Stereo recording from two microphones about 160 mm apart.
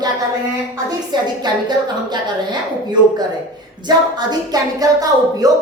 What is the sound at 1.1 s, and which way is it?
Speech, 25° right (ahead or behind).